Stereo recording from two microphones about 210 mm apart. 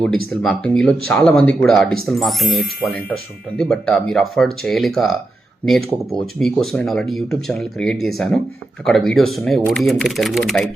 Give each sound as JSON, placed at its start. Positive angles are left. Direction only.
{"t": 0.4, "sound": "speech", "side_deg": 5}